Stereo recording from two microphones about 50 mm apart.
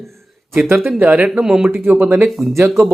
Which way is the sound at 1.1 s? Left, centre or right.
Right.